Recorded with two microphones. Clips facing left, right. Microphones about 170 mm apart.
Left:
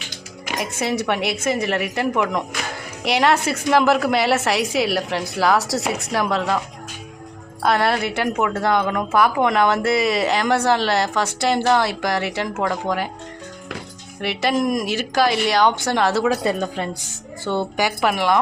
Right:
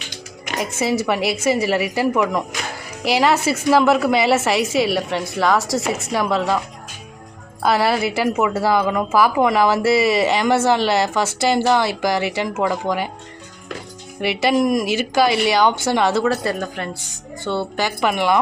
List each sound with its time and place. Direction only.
0.5 s a woman's voice: 5° right (ahead or behind)
7.6 s a woman's voice: 5° right (ahead or behind)
14.2 s a woman's voice: 5° right (ahead or behind)
16.4 s a woman's voice: 20° left (ahead or behind); by 18.3 s centre (ahead or behind)